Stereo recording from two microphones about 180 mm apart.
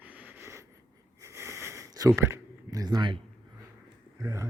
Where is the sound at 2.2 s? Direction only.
15° right (ahead or behind).